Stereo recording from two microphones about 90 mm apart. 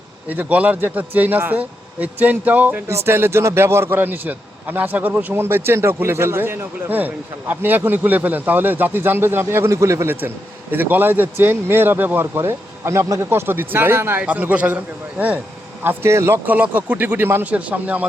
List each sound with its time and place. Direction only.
0.3 s a man's voice: 15° right (ahead or behind)
16.5 s a man's voice: 15° right (ahead or behind)